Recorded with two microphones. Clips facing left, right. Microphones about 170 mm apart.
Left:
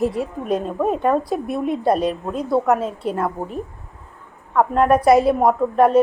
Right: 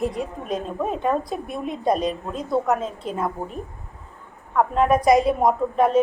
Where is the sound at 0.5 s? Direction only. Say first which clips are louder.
Left 5 dB; 50° left (ahead or behind).